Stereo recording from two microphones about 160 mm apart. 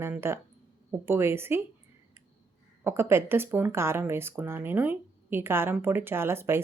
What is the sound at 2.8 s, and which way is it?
Speech, 15° right (ahead or behind).